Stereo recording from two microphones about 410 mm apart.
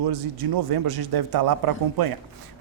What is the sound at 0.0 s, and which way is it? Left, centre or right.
A man's voice, right.